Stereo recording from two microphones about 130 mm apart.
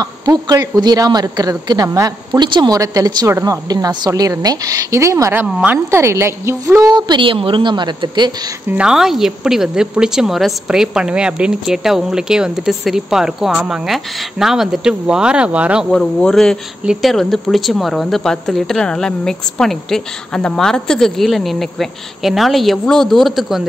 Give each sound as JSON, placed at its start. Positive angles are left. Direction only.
{"t": 0.0, "sound": "speech", "side_deg": -30}
{"t": 5.5, "sound": "a woman's voice", "side_deg": -5}
{"t": 5.9, "sound": "a woman's voice", "side_deg": -20}
{"t": 8.6, "sound": "speech", "side_deg": -10}
{"t": 15.9, "sound": "speech", "side_deg": 5}